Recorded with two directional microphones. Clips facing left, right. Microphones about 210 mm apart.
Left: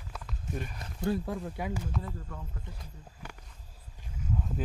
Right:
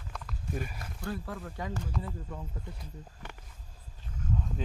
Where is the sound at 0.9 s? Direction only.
15° left (ahead or behind).